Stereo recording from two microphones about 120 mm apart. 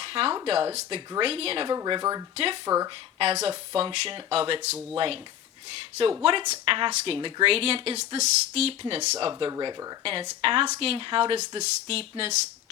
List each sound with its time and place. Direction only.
0.0 s a sound: 50° right (ahead or behind)
0.4 s speech: 55° right (ahead or behind)
1.6 s speech: 35° right (ahead or behind)
2.3 s speech: 50° right (ahead or behind)
2.6 s speech: 30° right (ahead or behind)
3.2 s speech: 55° right (ahead or behind)
6.7 s speech: 45° right (ahead or behind)
9.5 s speech: 35° right (ahead or behind)
10.0 s speech: 50° right (ahead or behind)